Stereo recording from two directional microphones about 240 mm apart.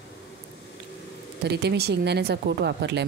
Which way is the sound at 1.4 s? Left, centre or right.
Right.